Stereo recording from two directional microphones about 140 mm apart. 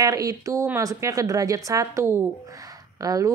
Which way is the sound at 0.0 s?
25° right (ahead or behind).